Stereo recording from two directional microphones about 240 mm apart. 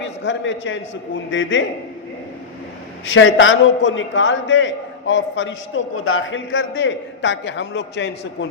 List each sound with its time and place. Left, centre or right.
0.0 s a man's voice: left
3.1 s a man's voice: left